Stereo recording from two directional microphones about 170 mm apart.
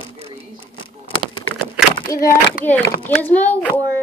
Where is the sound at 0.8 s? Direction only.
30° left (ahead or behind).